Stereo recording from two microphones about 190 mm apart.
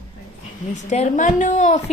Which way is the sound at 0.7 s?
40° left (ahead or behind).